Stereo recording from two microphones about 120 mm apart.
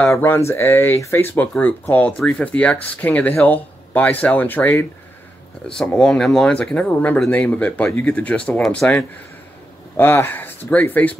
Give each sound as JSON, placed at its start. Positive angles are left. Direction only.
{"t": 0.0, "sound": "speech", "side_deg": 20}
{"t": 9.9, "sound": "speech", "side_deg": 15}